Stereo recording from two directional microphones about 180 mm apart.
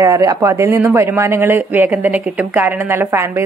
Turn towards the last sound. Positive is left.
turn(degrees=-15)  # may be behind; listen again after turning